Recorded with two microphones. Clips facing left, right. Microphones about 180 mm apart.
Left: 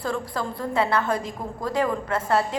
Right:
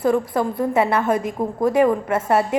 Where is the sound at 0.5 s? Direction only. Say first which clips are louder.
Right 3 dB; 25° right (ahead or behind).